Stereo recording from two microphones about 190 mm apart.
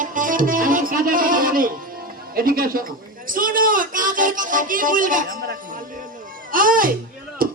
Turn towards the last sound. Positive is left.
turn(degrees=-50)  # may be behind; listen again after turning